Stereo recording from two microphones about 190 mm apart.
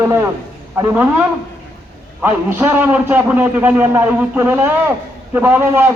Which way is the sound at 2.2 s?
10° right (ahead or behind).